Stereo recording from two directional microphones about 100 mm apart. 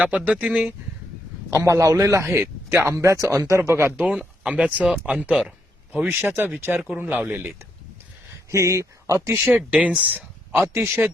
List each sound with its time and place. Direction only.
0.3 s speech: 15° right (ahead or behind)
1.5 s a man's voice: 30° right (ahead or behind); by 6.1 s 5° right (ahead or behind)
6.1 s speech: 20° right (ahead or behind)
8.4 s speech: 30° right (ahead or behind)
9.7 s speech: 15° right (ahead or behind)